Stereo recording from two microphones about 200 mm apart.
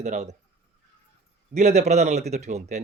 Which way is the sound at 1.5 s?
35° right (ahead or behind).